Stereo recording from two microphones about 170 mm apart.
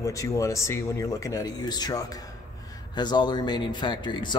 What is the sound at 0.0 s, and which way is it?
Speech, 20° left (ahead or behind).